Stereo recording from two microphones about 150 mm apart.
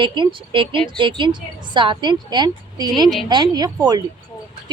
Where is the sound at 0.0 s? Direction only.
35° right (ahead or behind).